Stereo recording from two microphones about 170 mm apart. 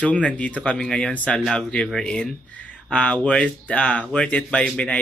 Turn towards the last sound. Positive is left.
turn(degrees=5)  # may be behind; listen again after turning